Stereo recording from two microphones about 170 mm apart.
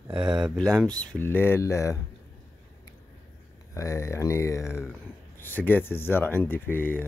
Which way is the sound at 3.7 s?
20° left (ahead or behind).